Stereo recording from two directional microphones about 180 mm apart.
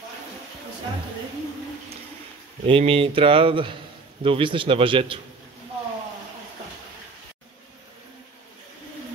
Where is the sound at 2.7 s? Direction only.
30° right (ahead or behind).